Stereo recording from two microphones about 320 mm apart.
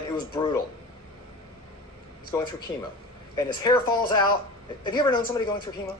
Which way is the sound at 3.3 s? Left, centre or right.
Centre.